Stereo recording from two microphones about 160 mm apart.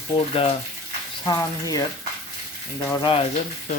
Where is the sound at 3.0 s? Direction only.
35° left (ahead or behind).